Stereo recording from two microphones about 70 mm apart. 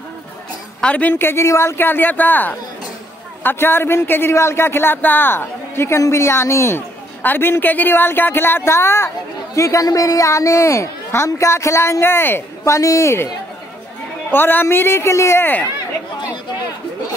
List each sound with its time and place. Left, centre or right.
0.7 s a woman's voice: centre
1.1 s speech: left
9.6 s a woman's voice: left
14.3 s speech: left